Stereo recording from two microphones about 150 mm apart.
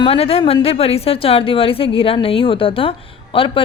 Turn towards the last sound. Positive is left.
turn(degrees=35)  # may be behind; listen again after turning